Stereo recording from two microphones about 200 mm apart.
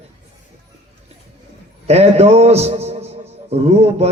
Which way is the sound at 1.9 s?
30° right (ahead or behind).